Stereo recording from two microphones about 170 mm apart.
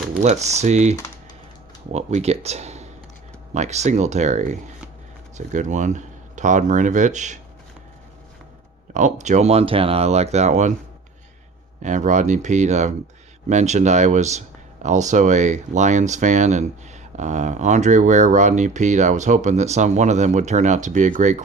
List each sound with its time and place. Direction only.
0.2 s speech: 40° right (ahead or behind)
8.9 s speech: 45° right (ahead or behind)
11.8 s speech: 45° right (ahead or behind)